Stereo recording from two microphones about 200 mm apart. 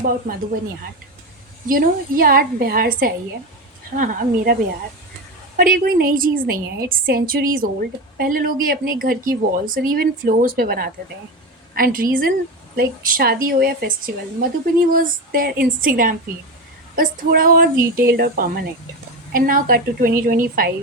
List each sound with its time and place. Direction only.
1.6 s a woman's voice: 45° right (ahead or behind)
5.5 s a woman's voice: 45° right (ahead or behind)